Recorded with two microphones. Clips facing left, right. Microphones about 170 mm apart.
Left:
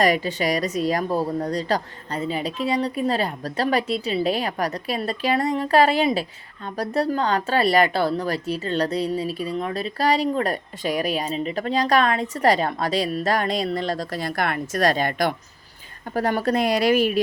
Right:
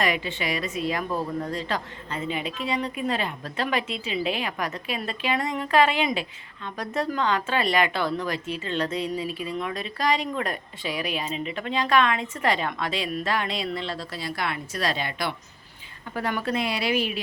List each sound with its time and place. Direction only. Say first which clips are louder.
0.0 s a woman's voice: left 6 dB; 40° left (ahead or behind)